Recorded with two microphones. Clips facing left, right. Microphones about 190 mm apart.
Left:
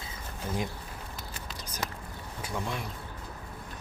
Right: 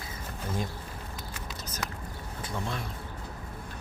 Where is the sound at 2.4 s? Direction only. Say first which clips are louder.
Even; 15° left (ahead or behind).